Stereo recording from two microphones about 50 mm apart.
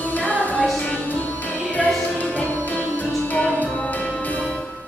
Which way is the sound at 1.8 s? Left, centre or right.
Left.